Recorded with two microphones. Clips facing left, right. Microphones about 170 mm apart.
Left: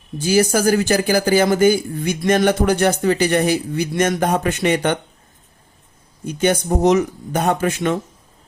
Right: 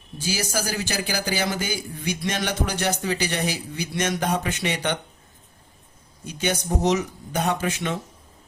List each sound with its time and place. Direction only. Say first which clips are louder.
0.2 s speech: left 11 dB; 55° left (ahead or behind)
6.2 s speech: left 8 dB; 50° left (ahead or behind)